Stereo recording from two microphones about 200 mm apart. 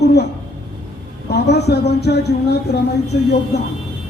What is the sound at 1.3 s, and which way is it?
A man's voice, 55° left (ahead or behind).